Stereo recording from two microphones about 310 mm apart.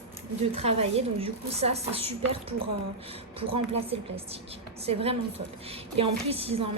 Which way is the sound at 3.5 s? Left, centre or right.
Centre.